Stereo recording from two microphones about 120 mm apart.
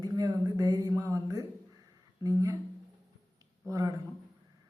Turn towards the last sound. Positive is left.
turn(degrees=-25)  # may be behind; listen again after turning